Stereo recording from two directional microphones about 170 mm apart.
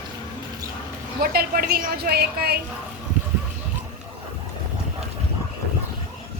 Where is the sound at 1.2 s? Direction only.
60° right (ahead or behind).